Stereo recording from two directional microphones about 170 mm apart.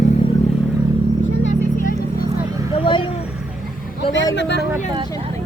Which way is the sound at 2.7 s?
30° left (ahead or behind).